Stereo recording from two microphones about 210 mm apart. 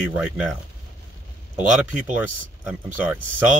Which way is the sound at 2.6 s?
5° right (ahead or behind).